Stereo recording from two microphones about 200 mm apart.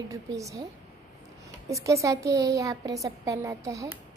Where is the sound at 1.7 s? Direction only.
15° right (ahead or behind).